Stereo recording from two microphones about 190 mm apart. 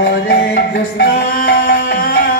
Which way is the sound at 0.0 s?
50° left (ahead or behind).